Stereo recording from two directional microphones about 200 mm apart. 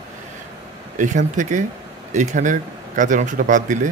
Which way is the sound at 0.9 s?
40° right (ahead or behind).